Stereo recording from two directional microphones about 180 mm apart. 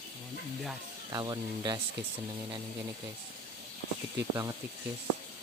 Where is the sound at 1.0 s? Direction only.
20° right (ahead or behind).